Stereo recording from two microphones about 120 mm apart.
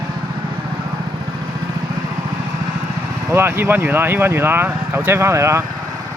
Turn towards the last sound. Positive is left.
turn(degrees=-25)  # may be behind; listen again after turning